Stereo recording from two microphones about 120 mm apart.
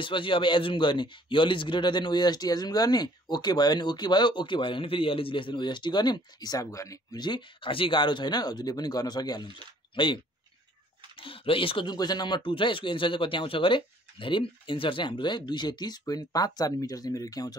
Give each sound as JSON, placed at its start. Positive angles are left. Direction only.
{"t": 0.0, "sound": "speech", "side_deg": 45}